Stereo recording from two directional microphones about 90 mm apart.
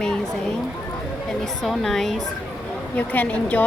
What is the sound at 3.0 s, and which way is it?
Speech, 15° left (ahead or behind).